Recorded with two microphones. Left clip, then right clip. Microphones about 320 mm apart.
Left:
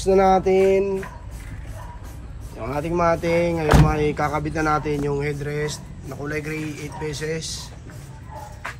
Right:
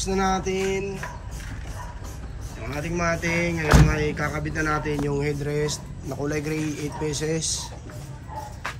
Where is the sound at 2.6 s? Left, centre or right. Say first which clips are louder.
Left 6 dB; centre.